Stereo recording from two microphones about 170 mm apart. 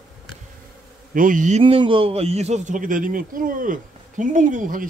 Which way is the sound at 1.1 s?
50° right (ahead or behind).